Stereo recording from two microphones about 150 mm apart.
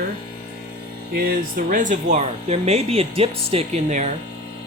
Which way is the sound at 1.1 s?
85° right.